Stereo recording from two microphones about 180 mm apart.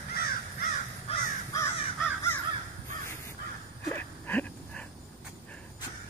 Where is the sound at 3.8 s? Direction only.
10° left (ahead or behind).